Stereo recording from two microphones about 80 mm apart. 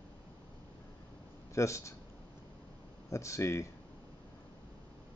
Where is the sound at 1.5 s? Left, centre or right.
Left.